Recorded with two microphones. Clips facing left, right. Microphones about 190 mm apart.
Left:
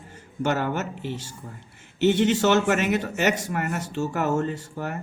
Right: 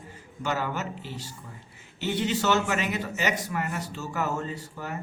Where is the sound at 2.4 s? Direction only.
50° left (ahead or behind).